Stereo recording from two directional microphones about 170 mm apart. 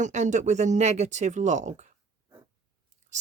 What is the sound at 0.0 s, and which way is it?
Speech, 45° right (ahead or behind).